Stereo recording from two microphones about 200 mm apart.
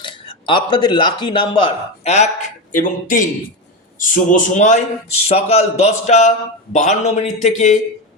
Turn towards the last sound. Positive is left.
turn(degrees=35)  # may be behind; listen again after turning